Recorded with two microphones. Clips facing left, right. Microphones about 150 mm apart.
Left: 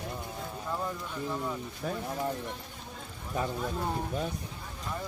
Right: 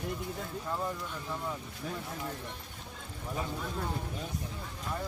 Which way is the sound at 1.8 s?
60° left (ahead or behind).